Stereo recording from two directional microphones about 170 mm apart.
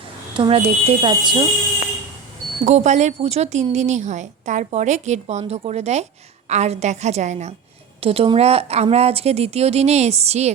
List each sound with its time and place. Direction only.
0.3 s speech: 30° right (ahead or behind)
2.6 s a woman's voice: 40° right (ahead or behind)